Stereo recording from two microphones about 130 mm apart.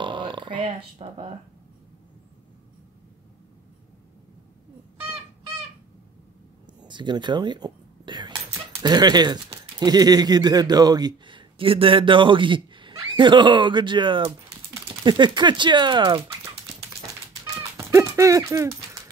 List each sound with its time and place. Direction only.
0.0 s burping: 40° right (ahead or behind)
0.7 s speech: 40° right (ahead or behind)
6.8 s speech: 35° right (ahead or behind)
17.7 s dog: 20° right (ahead or behind)